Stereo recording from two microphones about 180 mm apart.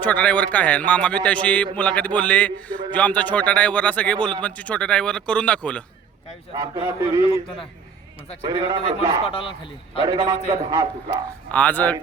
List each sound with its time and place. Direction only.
0.0 s a man's voice: 10° left (ahead or behind)
6.5 s a man's voice: 25° right (ahead or behind)
8.4 s a man's voice: 25° right (ahead or behind)
9.2 s a man's voice: 30° left (ahead or behind)
10.0 s a man's voice: 25° right (ahead or behind)
11.5 s a man's voice: 10° left (ahead or behind)